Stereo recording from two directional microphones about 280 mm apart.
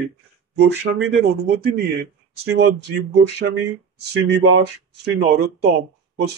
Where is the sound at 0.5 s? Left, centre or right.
Right.